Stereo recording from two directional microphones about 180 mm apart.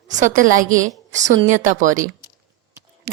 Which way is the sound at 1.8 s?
45° right (ahead or behind).